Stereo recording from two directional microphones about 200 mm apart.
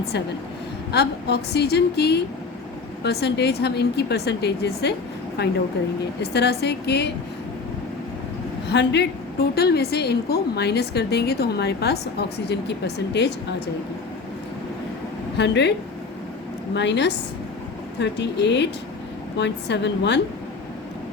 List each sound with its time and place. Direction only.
0.9 s a woman's voice: 55° left (ahead or behind)
8.7 s a woman's voice: 60° left (ahead or behind)
15.4 s a woman's voice: 60° left (ahead or behind)
16.7 s a woman's voice: 60° left (ahead or behind)